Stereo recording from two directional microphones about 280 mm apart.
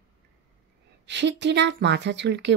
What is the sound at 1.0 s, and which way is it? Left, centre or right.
Speech, right.